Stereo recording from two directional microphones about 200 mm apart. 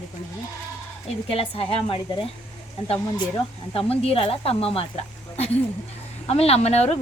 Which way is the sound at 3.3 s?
30° left (ahead or behind).